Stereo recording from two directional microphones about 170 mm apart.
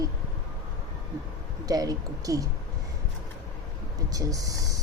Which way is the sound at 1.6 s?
20° right (ahead or behind).